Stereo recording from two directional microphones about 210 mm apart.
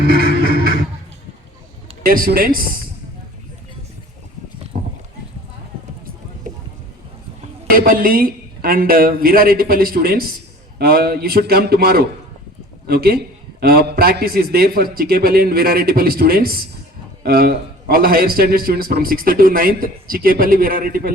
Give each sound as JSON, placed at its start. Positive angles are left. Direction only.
{"t": 0.0, "sound": "music", "side_deg": -50}
{"t": 2.0, "sound": "a man's voice", "side_deg": -45}
{"t": 7.7, "sound": "a man's voice", "side_deg": -45}